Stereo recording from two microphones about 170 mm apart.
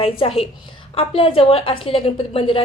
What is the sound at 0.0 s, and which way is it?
A woman's voice, 35° left (ahead or behind).